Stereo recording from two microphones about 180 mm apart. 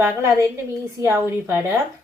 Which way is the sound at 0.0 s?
10° right (ahead or behind).